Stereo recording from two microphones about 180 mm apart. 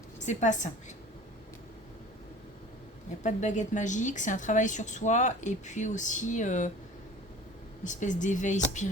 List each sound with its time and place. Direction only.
0.2 s a woman's voice: 45° left (ahead or behind)
3.2 s a woman's voice: 40° left (ahead or behind)
7.9 s a woman's voice: 45° left (ahead or behind)